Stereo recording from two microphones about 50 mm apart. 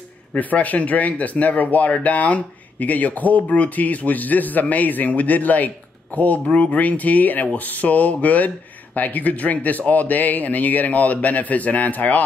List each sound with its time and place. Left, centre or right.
0.3 s speech: left